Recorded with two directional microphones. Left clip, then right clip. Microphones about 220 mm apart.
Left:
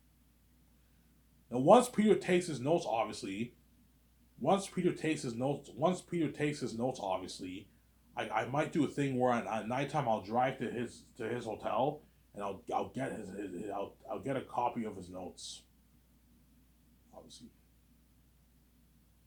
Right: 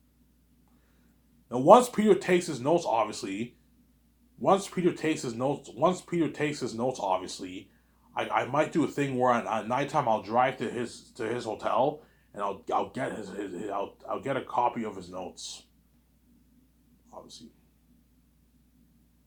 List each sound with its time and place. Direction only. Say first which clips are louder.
1.5 s speech: right 7 dB; 20° right (ahead or behind)
4.4 s speech: right 7 dB; 20° right (ahead or behind)